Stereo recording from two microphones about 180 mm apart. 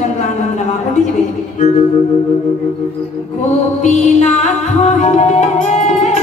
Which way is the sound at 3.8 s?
40° left (ahead or behind).